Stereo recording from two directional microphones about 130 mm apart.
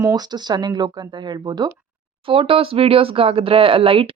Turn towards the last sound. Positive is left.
turn(degrees=-45)  # may be behind; listen again after turning